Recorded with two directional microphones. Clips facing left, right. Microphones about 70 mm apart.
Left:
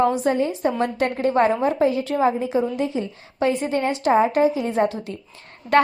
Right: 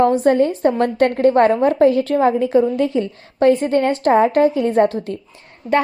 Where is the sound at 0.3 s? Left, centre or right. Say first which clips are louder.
Right 6 dB; right.